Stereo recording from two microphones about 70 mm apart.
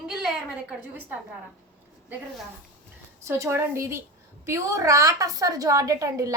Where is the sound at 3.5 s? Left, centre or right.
Right.